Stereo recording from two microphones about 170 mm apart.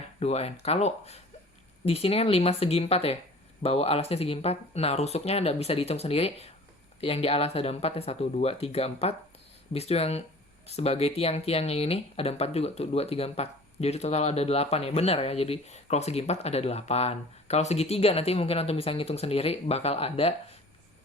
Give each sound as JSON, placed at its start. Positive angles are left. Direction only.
{"t": 0.2, "sound": "speech", "side_deg": 40}